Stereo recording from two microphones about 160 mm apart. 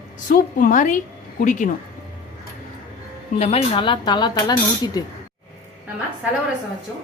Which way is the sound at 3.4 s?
40° left (ahead or behind).